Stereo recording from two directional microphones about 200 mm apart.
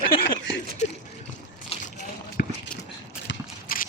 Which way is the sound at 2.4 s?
50° left (ahead or behind).